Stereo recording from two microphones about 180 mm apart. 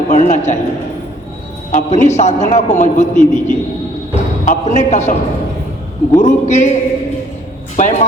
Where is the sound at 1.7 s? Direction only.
40° left (ahead or behind).